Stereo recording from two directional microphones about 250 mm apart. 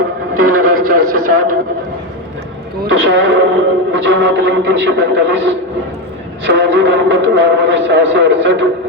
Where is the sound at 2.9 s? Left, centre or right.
Right.